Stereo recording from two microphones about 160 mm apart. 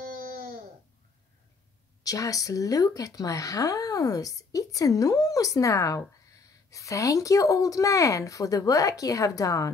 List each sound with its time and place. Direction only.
2.0 s speech: 20° left (ahead or behind)